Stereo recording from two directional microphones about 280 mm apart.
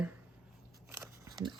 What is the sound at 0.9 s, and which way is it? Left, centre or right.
Biting, centre.